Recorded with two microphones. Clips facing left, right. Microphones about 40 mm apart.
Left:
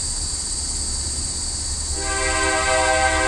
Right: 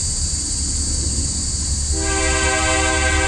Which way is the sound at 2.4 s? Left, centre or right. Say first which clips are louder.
Left 2 dB; right.